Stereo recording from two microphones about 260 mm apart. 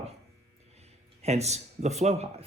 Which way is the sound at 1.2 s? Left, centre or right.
Right.